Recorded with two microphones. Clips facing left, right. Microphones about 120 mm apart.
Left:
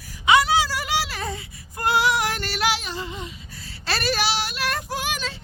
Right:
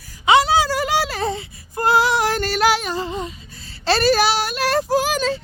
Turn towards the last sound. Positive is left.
turn(degrees=-40)  # may be behind; listen again after turning